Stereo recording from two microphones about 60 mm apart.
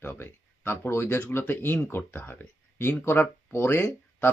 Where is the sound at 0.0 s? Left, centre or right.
Left.